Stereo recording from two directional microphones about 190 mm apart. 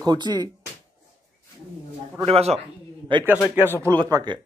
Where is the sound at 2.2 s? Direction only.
30° right (ahead or behind).